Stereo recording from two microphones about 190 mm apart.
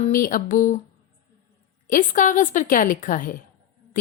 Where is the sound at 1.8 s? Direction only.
45° left (ahead or behind).